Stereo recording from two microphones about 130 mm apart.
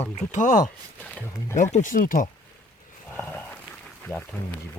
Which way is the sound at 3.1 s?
15° left (ahead or behind).